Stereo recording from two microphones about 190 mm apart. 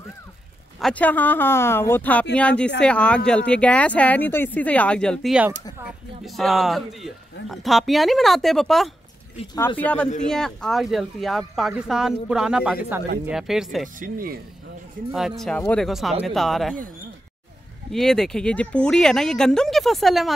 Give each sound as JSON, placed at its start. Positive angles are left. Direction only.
{"t": 0.7, "sound": "speech", "side_deg": 5}
{"t": 13.9, "sound": "speech", "side_deg": -45}
{"t": 15.1, "sound": "speech", "side_deg": 0}
{"t": 17.9, "sound": "speech", "side_deg": 0}